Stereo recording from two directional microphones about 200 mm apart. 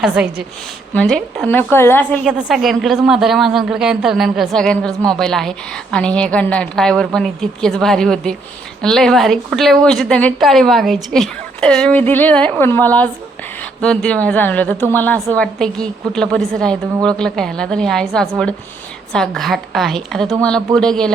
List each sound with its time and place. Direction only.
0.0 s a woman's voice: 5° right (ahead or behind)